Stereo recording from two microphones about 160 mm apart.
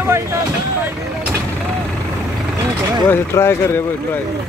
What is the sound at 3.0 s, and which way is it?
Speech, 15° left (ahead or behind).